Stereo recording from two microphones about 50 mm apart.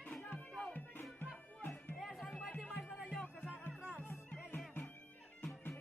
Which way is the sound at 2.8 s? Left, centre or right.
Left.